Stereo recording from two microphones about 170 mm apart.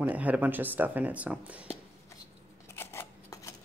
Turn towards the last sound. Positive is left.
turn(degrees=15)  # may be behind; listen again after turning